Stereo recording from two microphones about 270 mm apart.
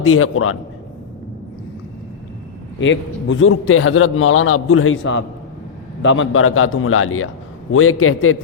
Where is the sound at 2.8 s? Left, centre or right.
Left.